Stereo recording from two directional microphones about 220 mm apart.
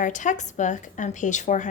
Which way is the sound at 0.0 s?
35° left (ahead or behind).